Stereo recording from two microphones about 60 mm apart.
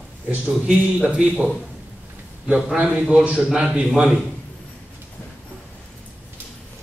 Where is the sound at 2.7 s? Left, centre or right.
Right.